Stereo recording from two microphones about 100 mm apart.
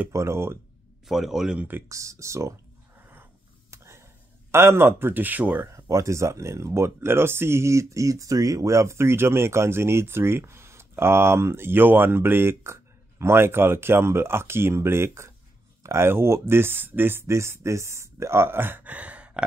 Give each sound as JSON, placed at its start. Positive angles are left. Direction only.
{"t": 0.1, "sound": "speech", "side_deg": -25}
{"t": 1.0, "sound": "speech", "side_deg": -5}
{"t": 1.9, "sound": "speech", "side_deg": -30}
{"t": 3.0, "sound": "a sound", "side_deg": -20}
{"t": 5.7, "sound": "speech", "side_deg": -30}